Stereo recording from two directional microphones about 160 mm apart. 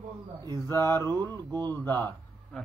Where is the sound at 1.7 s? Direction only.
10° left (ahead or behind).